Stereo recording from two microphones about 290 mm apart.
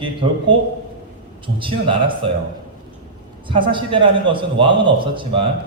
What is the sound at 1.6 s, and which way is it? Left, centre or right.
Speech, centre.